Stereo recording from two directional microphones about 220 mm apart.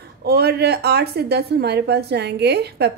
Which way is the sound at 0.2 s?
45° right (ahead or behind).